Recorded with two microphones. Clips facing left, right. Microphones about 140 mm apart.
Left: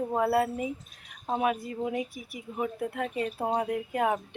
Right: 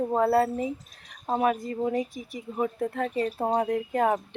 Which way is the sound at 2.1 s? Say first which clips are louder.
Right 4 dB; 10° left (ahead or behind).